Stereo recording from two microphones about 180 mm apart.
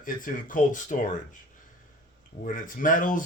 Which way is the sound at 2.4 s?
50° left (ahead or behind).